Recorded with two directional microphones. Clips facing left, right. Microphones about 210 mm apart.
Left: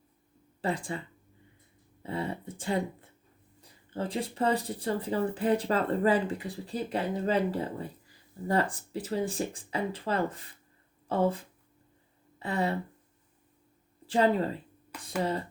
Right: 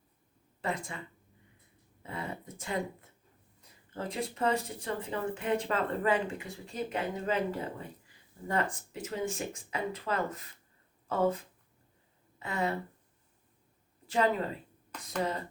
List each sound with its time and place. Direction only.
0.6 s speech: 30° left (ahead or behind)
2.0 s speech: 30° left (ahead or behind)
14.1 s speech: 35° left (ahead or behind)
14.9 s speech: 10° left (ahead or behind)